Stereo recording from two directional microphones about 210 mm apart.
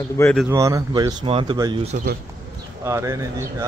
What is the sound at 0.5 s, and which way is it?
Speech, 15° right (ahead or behind).